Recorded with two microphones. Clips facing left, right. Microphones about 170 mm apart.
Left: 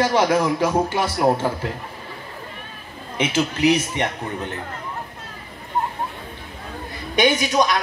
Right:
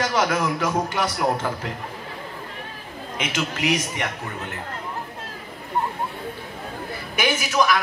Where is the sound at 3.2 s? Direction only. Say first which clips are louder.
Left 7 dB; 30° left (ahead or behind).